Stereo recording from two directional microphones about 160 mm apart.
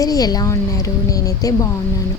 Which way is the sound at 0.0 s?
20° left (ahead or behind).